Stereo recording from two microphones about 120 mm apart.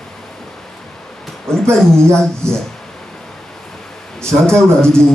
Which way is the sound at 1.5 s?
5° left (ahead or behind).